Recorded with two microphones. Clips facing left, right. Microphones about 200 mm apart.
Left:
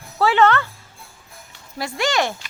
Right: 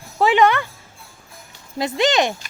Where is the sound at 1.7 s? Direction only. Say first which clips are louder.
Right 4 dB; 20° right (ahead or behind).